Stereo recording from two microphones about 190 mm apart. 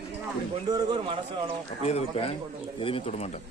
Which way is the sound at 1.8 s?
30° left (ahead or behind).